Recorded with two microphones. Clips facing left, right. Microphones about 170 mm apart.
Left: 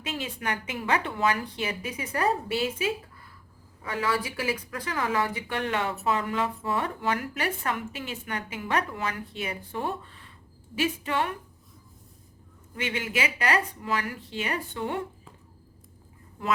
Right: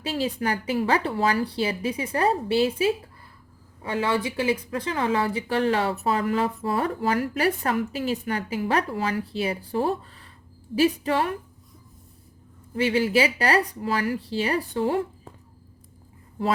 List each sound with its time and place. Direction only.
0.0 s speech: 35° right (ahead or behind)
12.7 s speech: 35° right (ahead or behind)
16.4 s speech: 35° right (ahead or behind)